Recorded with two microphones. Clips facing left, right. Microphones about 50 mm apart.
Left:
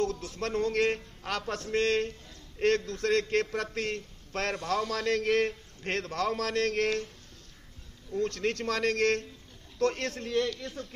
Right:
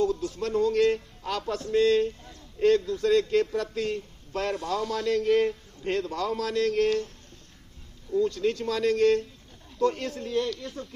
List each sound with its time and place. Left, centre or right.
0.0 s a man's voice: left
8.2 s a man's voice: left